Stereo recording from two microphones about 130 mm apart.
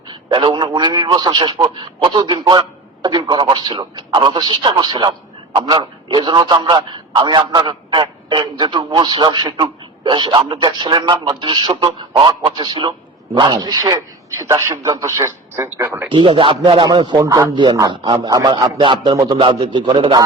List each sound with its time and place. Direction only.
0.1 s a man's voice: 35° right (ahead or behind); by 16.0 s 20° right (ahead or behind)
16.1 s a man's voice: 40° right (ahead or behind)